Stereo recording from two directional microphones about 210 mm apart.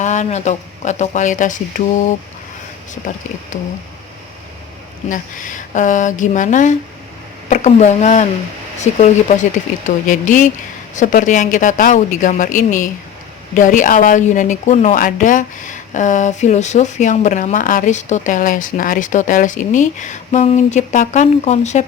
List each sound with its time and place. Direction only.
0.0 s speech: 35° left (ahead or behind)
5.0 s speech: 40° left (ahead or behind)